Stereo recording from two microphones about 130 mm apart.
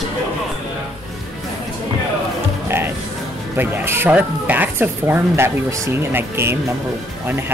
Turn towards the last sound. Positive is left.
turn(degrees=-15)  # may be behind; listen again after turning